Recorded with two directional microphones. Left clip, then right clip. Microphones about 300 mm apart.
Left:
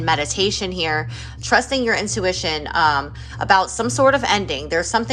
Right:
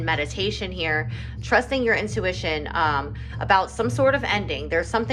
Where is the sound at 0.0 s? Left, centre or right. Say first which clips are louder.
Left 6 dB; centre.